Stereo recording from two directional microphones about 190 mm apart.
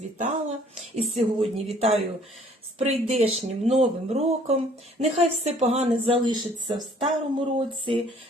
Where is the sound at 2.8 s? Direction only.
35° right (ahead or behind).